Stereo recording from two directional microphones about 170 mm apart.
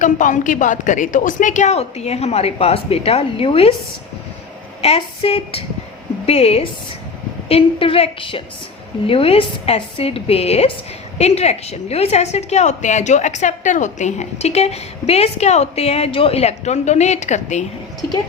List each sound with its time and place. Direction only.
0.0 s a woman's voice: 50° left (ahead or behind); by 3.7 s 35° left (ahead or behind)
4.8 s a woman's voice: 35° left (ahead or behind)